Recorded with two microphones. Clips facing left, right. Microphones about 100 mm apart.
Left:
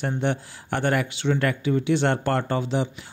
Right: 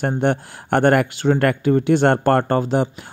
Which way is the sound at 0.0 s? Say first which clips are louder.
Right 6 dB; 55° right (ahead or behind).